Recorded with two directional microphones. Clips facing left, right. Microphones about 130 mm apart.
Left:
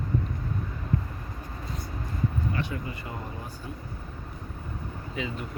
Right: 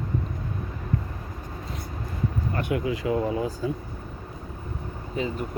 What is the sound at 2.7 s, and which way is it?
Speech, 90° right.